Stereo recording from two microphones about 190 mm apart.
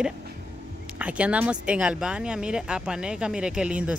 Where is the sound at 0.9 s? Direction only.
5° right (ahead or behind).